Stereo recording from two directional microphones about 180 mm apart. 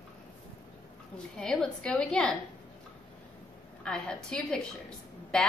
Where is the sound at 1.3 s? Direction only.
5° left (ahead or behind).